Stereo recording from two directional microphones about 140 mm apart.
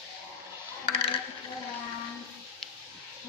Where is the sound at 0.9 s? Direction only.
40° left (ahead or behind).